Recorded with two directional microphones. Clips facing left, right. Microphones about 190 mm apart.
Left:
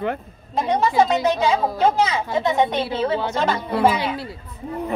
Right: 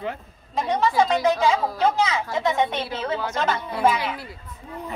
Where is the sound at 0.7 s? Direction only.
30° left (ahead or behind).